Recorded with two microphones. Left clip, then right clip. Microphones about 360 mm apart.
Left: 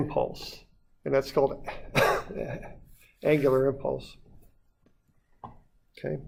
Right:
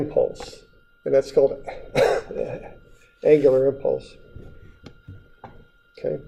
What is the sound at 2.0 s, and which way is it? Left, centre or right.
Speech, left.